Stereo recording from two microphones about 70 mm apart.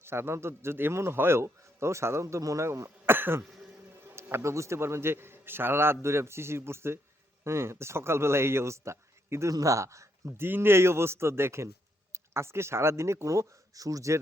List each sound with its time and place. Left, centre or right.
0.0 s a man's voice: right
3.1 s cough: right
4.1 s a man's voice: right